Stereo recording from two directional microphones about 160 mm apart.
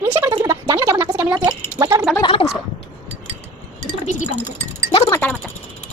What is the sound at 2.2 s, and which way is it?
Gargling, 35° left (ahead or behind).